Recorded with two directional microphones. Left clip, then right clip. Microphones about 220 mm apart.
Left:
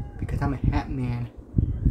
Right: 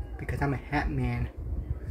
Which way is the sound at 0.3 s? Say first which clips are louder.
Left 1 dB; centre (ahead or behind).